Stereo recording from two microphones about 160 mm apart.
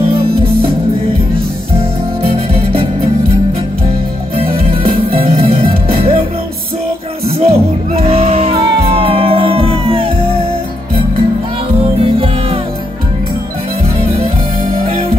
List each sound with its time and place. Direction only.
1.8 s music: 35° right (ahead or behind)
4.4 s music: 35° right (ahead or behind)
7.2 s music: 40° right (ahead or behind)
12.0 s music: 35° right (ahead or behind)